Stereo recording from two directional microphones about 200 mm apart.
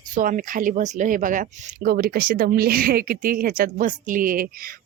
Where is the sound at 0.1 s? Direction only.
40° right (ahead or behind).